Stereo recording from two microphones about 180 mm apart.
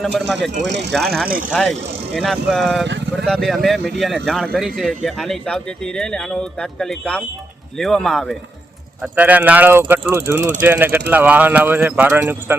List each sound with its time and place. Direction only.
0.0 s speech: centre (ahead or behind)
0.7 s speech: 75° right (ahead or behind)
0.9 s speech: 5° left (ahead or behind)
2.8 s speech: 75° right (ahead or behind)
3.2 s speech: centre (ahead or behind)
9.0 s speech: 10° right (ahead or behind)